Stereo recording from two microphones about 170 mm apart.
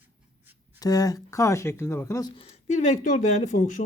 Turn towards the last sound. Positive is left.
turn(degrees=45)  # may be behind; listen again after turning